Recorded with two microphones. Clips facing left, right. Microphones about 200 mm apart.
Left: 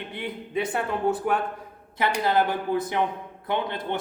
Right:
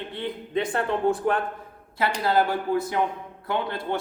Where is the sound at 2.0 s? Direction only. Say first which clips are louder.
Even; 20° left (ahead or behind).